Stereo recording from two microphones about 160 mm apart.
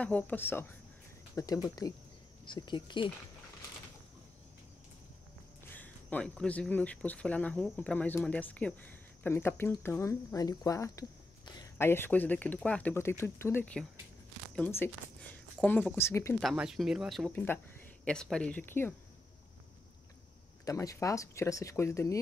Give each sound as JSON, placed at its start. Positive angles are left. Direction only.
{"t": 0.0, "sound": "speech", "side_deg": 10}
{"t": 5.7, "sound": "speech", "side_deg": 10}
{"t": 16.3, "sound": "speech", "side_deg": 0}
{"t": 17.3, "sound": "speech", "side_deg": 10}
{"t": 20.6, "sound": "speech", "side_deg": 20}